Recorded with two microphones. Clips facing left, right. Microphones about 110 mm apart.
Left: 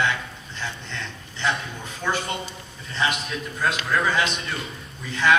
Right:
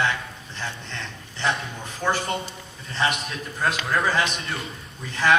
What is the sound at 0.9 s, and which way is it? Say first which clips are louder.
A man's voice: left 1 dB; 30° right (ahead or behind).